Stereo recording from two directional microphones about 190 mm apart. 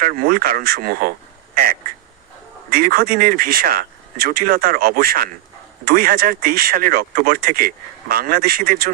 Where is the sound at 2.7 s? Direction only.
50° right (ahead or behind).